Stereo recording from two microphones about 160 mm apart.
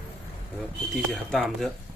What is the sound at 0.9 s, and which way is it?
Speech, centre (ahead or behind).